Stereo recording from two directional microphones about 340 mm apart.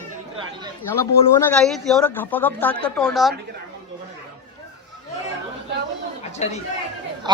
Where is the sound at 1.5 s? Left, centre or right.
Centre.